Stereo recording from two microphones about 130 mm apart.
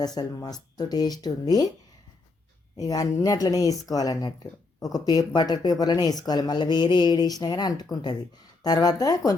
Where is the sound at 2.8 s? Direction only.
25° left (ahead or behind).